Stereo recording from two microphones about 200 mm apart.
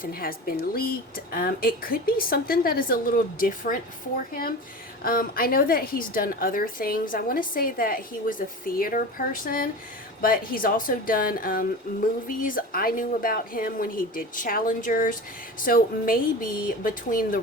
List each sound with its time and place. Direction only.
0.0 s a woman's voice: 45° left (ahead or behind)
5.0 s a woman's voice: 45° left (ahead or behind)